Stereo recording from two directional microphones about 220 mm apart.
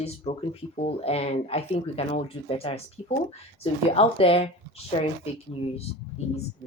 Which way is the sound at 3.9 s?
25° left (ahead or behind).